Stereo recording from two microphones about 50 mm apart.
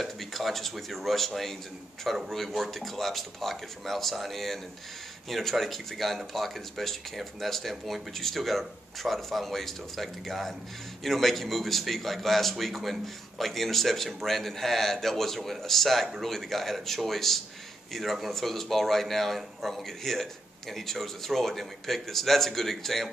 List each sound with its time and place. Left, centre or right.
0.0 s speech: centre